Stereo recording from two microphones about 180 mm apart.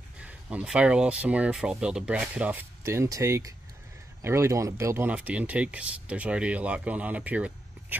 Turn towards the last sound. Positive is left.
turn(degrees=-10)  # may be behind; listen again after turning